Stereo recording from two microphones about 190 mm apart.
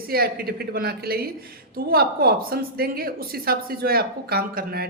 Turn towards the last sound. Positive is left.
turn(degrees=-55)  # may be behind; listen again after turning